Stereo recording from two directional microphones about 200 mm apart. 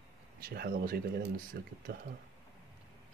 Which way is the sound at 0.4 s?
50° right (ahead or behind).